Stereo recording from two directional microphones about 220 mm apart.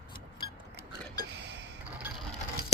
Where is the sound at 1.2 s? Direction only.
50° right (ahead or behind).